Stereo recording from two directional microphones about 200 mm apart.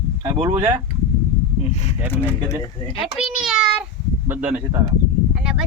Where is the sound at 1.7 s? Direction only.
30° left (ahead or behind).